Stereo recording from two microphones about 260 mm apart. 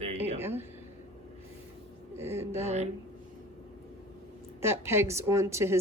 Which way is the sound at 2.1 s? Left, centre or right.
Centre.